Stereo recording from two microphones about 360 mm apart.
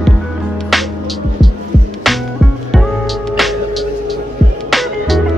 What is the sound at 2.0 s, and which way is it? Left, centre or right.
Music, centre.